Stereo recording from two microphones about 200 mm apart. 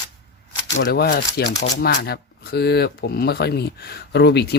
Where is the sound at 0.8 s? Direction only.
50° left (ahead or behind).